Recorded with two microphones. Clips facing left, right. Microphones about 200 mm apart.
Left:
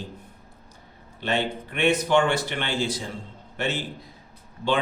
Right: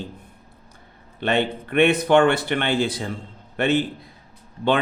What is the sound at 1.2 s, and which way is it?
A man's voice, 60° right (ahead or behind).